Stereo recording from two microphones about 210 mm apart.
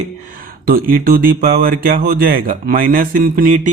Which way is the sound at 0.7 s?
45° right (ahead or behind).